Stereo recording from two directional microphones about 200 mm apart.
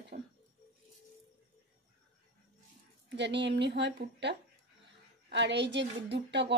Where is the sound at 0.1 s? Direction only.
40° right (ahead or behind).